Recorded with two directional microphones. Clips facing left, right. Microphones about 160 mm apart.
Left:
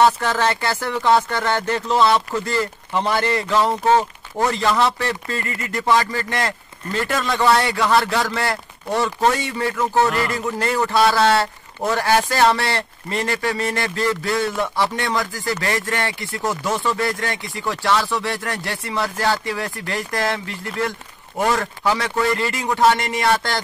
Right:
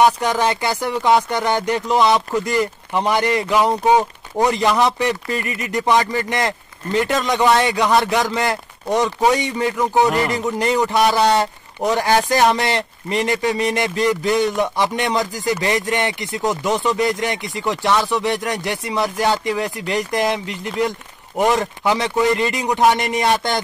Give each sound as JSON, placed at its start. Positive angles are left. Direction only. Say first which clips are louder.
{"t": 0.0, "sound": "a man's voice", "louder": "right 1 dB", "side_deg": -15}